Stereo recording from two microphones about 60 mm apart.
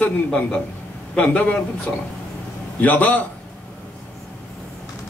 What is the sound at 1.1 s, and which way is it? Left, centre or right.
A man's voice, centre.